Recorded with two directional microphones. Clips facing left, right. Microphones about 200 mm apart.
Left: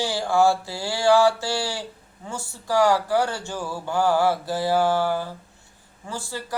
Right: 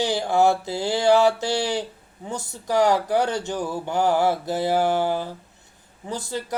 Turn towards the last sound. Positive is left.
turn(degrees=-20)  # may be behind; listen again after turning